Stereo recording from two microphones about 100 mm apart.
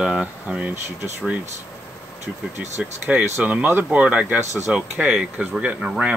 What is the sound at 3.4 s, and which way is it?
Speech, 15° right (ahead or behind).